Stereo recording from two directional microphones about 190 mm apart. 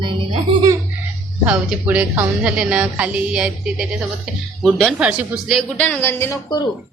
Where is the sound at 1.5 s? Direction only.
10° right (ahead or behind); by 6.7 s 15° left (ahead or behind).